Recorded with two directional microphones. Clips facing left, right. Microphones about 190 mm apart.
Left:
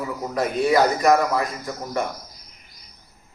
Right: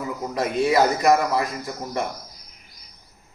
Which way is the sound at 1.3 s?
25° right (ahead or behind).